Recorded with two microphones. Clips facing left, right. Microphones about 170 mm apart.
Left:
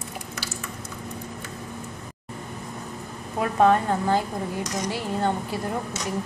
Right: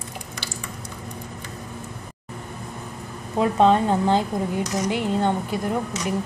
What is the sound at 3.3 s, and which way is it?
Speech, 20° right (ahead or behind).